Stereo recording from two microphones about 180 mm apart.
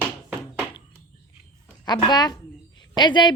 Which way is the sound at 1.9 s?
25° left (ahead or behind).